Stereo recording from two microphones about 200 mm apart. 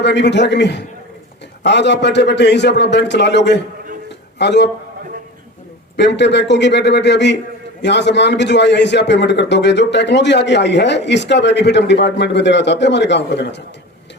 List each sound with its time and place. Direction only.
0.0 s a man's voice: 60° left (ahead or behind)
6.0 s a man's voice: 60° left (ahead or behind)